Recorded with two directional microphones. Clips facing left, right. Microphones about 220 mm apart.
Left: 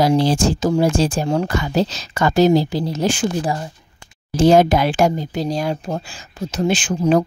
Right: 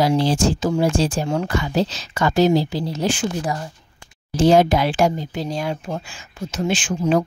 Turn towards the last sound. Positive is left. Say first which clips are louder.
# left 3 dB
turn(degrees=40)  # may be behind; listen again after turning